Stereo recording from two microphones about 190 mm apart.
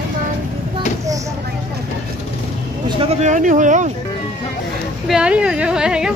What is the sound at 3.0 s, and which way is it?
Speech, 35° right (ahead or behind).